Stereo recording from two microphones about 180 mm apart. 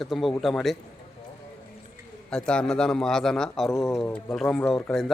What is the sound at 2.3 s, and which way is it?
Speech, 5° left (ahead or behind).